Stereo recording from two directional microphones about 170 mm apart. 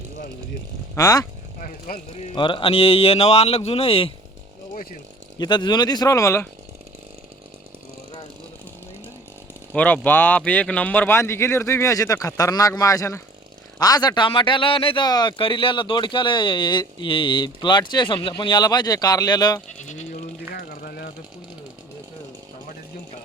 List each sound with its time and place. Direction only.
0.9 s a man's voice: 20° left (ahead or behind)
2.3 s speech: 30° left (ahead or behind)
4.7 s chainsaw: 55° left (ahead or behind)
5.4 s a man's voice: 25° left (ahead or behind)
9.7 s a man's voice: 10° left (ahead or behind); by 19.6 s 25° left (ahead or behind)
19.6 s sheep: 45° left (ahead or behind)
20.5 s a sound: 65° left (ahead or behind)